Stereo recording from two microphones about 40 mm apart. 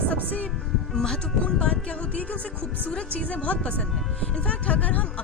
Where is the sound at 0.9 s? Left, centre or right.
Centre.